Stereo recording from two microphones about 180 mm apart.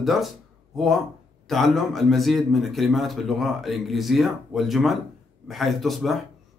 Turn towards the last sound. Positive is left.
turn(degrees=0)  # may be behind; listen again after turning